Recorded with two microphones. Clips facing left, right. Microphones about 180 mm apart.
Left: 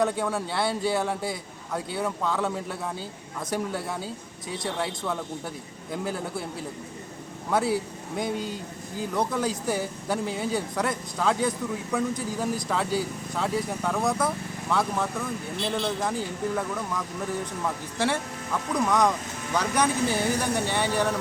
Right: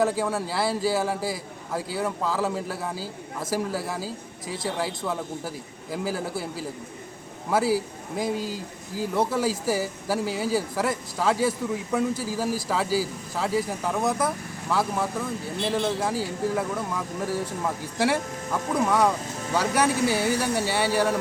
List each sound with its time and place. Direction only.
0.0 s a man's voice: 5° right (ahead or behind)